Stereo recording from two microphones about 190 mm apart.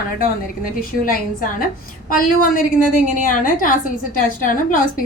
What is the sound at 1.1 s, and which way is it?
A woman's voice, 45° left (ahead or behind).